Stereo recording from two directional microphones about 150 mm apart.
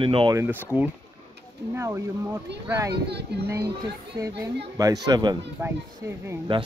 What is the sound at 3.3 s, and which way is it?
Speech, 90° right.